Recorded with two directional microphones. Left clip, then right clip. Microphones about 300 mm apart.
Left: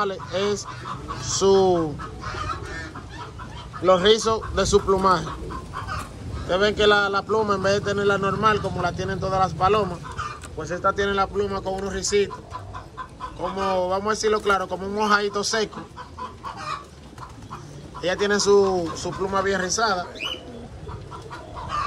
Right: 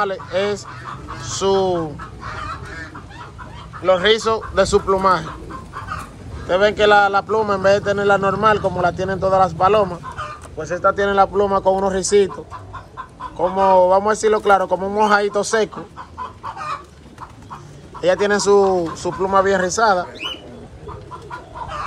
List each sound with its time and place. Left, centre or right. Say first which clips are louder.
0.0 s a man's voice: right 5 dB; centre
3.8 s a man's voice: right 2 dB; centre
6.4 s a man's voice: right 5 dB; centre
13.4 s a man's voice: right 11 dB; centre
18.0 s a man's voice: right 5 dB; centre